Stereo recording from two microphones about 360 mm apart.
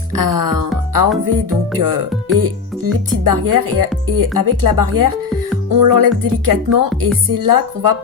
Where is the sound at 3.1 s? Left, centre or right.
Right.